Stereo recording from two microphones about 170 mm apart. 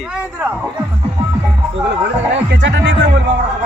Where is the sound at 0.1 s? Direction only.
5° right (ahead or behind).